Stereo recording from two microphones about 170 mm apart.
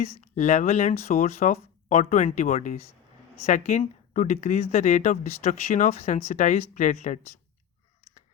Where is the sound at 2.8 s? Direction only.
15° left (ahead or behind).